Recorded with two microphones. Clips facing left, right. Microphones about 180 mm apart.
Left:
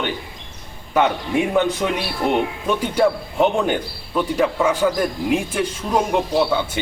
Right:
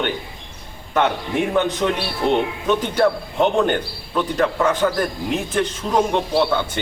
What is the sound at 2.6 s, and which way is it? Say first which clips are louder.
A man's voice: right 1 dB; 10° left (ahead or behind).